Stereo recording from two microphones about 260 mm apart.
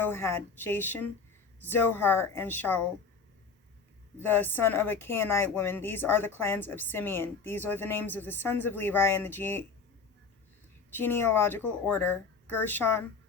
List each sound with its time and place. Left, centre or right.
0.0 s a woman's voice: centre
4.2 s a woman's voice: centre
10.9 s a woman's voice: centre